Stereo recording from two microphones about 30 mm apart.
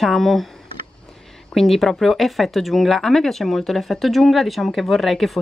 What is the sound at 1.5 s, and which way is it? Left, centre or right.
Speech, centre.